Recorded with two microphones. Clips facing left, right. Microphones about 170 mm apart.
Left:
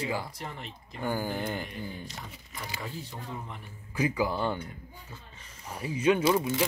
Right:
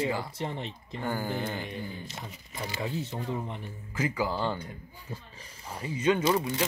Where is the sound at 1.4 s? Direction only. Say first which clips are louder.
Even; centre (ahead or behind).